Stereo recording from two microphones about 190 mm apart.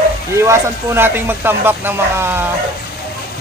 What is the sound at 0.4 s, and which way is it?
A man's voice, 15° right (ahead or behind).